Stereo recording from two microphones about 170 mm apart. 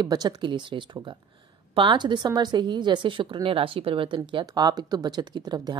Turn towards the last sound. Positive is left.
turn(degrees=-25)  # may be behind; listen again after turning